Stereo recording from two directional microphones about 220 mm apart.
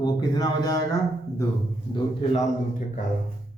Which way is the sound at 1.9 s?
25° left (ahead or behind).